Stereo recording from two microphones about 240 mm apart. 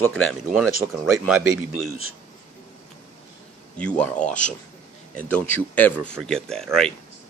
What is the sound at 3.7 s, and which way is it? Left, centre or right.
A man's voice, centre.